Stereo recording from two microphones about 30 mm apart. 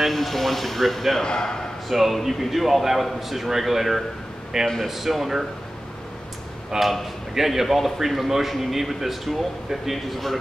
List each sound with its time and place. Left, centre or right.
0.1 s speech: centre
1.2 s speech: left
1.9 s speech: centre
6.7 s a man's voice: centre